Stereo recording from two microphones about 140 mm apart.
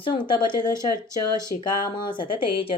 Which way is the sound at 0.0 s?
35° left (ahead or behind).